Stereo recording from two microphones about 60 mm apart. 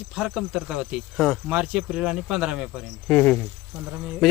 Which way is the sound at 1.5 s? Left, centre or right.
Centre.